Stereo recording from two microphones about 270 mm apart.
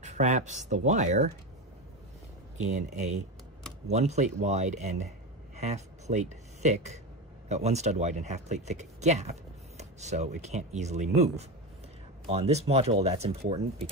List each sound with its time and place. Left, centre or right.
0.0 s speech: right
2.5 s speech: right